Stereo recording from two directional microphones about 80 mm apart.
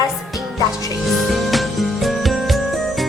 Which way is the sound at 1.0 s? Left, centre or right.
Centre.